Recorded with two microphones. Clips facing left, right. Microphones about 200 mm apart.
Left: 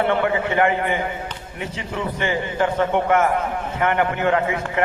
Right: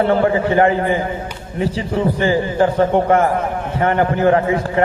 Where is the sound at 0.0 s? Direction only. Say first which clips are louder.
Right 5 dB; 35° right (ahead or behind).